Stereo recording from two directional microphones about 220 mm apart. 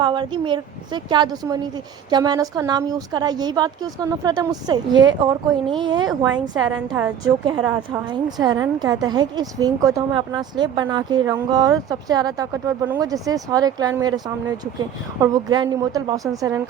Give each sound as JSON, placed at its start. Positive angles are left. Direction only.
{"t": 0.0, "sound": "speech", "side_deg": -20}
{"t": 6.5, "sound": "a woman's voice", "side_deg": -10}
{"t": 15.2, "sound": "a woman's voice", "side_deg": -15}